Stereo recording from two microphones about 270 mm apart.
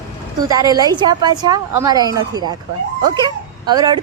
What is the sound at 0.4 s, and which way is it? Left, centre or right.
A woman's voice, centre.